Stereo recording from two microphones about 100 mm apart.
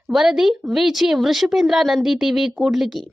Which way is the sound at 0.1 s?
5° right (ahead or behind).